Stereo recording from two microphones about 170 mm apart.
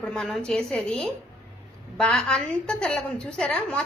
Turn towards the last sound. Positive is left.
turn(degrees=5)  # may be behind; listen again after turning